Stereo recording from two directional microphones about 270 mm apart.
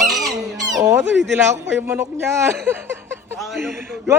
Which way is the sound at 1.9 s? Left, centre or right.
Centre.